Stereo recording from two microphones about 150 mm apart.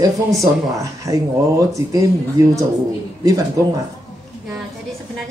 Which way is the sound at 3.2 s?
25° right (ahead or behind).